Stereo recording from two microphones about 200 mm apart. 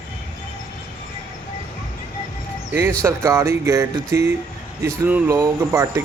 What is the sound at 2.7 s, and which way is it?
Speech, 15° right (ahead or behind).